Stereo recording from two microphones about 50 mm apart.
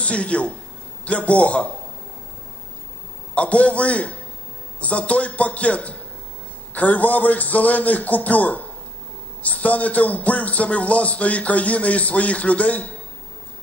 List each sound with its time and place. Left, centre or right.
0.0 s a man's voice: left
3.3 s a man's voice: left